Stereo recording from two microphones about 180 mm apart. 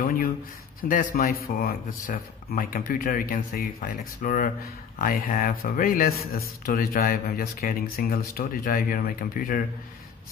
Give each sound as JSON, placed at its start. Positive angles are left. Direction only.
{"t": 0.7, "sound": "speech", "side_deg": 50}